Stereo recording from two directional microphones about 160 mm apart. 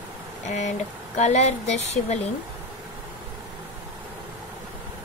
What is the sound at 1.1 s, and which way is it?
Speech, 45° left (ahead or behind).